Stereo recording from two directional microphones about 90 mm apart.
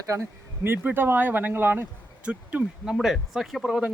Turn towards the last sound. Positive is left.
turn(degrees=0)  # may be behind; listen again after turning